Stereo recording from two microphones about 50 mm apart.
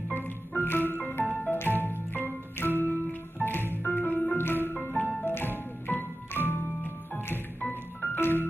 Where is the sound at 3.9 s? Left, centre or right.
Left.